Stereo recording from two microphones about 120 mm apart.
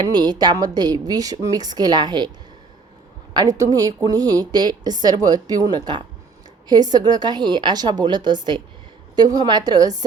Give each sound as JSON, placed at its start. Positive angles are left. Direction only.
{"t": 0.1, "sound": "a woman's voice", "side_deg": -35}
{"t": 3.3, "sound": "a woman's voice", "side_deg": -30}